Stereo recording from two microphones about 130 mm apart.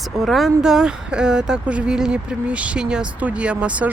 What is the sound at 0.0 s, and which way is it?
Speech, centre (ahead or behind).